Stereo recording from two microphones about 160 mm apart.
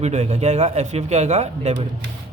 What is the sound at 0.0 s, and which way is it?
Speech, 45° right (ahead or behind).